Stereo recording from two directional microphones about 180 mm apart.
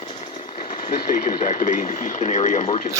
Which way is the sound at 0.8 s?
50° left (ahead or behind).